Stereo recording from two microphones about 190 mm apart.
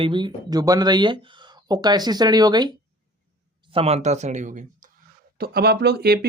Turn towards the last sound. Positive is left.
turn(degrees=-55)  # may be behind; listen again after turning